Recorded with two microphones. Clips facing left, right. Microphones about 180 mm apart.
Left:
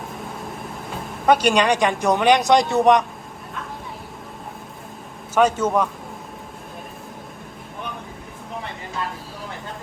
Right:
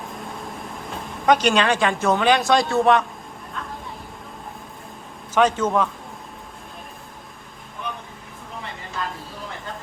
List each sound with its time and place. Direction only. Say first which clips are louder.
1.3 s speech: left 1 dB; 10° left (ahead or behind)
5.3 s speech: left 1 dB; 10° left (ahead or behind)